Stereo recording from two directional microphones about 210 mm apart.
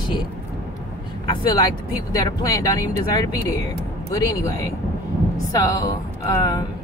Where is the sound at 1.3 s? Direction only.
20° left (ahead or behind).